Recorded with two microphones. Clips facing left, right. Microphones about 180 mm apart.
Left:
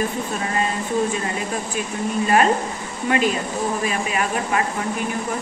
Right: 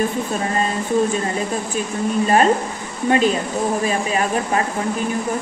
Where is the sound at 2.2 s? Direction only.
35° right (ahead or behind).